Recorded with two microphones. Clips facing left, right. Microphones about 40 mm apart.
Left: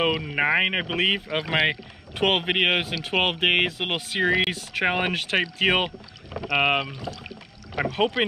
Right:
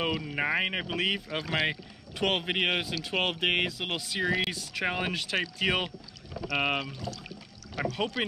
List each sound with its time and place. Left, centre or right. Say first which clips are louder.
0.1 s speech: left 6 dB; left
1.4 s speech: left 6 dB; left
1.7 s speech: left 6 dB; left